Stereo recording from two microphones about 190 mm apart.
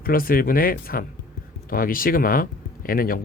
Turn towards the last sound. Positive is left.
turn(degrees=50)  # may be behind; listen again after turning